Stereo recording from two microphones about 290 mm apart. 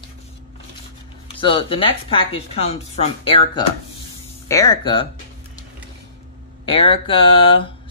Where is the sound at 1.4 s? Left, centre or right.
Centre.